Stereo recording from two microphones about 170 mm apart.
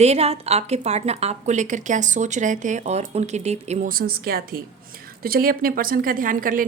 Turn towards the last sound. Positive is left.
turn(degrees=-55)  # may be behind; listen again after turning